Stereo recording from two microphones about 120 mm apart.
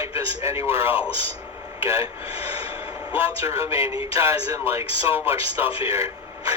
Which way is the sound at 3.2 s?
25° right (ahead or behind).